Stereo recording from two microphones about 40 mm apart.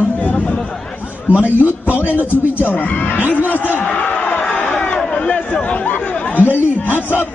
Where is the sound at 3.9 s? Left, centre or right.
Left.